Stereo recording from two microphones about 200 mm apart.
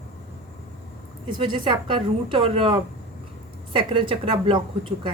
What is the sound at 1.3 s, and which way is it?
Speech, 25° right (ahead or behind).